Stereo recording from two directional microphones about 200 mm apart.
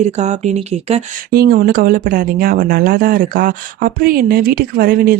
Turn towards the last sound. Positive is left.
turn(degrees=-50)  # may be behind; listen again after turning